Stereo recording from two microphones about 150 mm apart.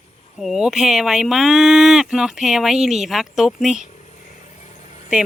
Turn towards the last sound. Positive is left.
turn(degrees=50)  # may be behind; listen again after turning